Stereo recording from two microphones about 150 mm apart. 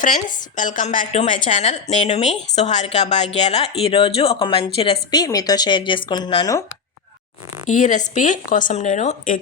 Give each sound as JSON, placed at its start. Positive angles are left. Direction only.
{"t": 0.0, "sound": "a woman's voice", "side_deg": 60}
{"t": 5.1, "sound": "speech", "side_deg": 25}
{"t": 7.7, "sound": "speech", "side_deg": 55}